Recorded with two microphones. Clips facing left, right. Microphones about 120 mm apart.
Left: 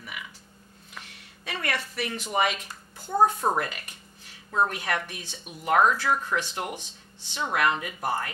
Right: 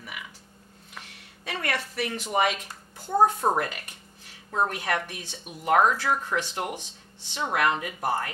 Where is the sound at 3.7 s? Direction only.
45° right (ahead or behind).